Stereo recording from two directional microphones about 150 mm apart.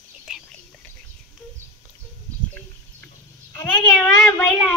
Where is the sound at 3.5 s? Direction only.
10° left (ahead or behind).